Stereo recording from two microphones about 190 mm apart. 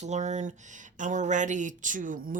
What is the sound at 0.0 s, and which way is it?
Speech, 40° right (ahead or behind).